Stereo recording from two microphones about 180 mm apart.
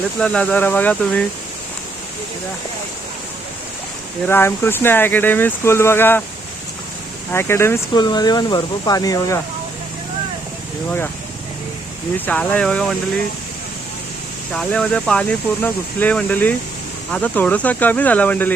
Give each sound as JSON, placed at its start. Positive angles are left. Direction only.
{"t": 0.2, "sound": "speech", "side_deg": 5}
{"t": 4.3, "sound": "speech", "side_deg": 15}
{"t": 7.3, "sound": "speech", "side_deg": 15}
{"t": 12.1, "sound": "speech", "side_deg": 10}
{"t": 14.5, "sound": "speech", "side_deg": 5}